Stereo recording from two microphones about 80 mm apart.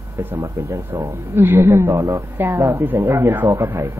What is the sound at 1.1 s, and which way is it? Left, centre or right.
A woman's voice, right.